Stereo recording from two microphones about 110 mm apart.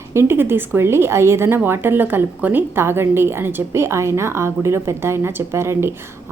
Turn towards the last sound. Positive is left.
turn(degrees=-25)  # may be behind; listen again after turning